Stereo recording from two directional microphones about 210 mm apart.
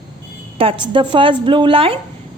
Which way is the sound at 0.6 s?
25° right (ahead or behind).